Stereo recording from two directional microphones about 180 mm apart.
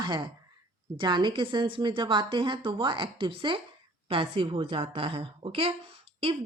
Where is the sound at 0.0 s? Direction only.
25° right (ahead or behind).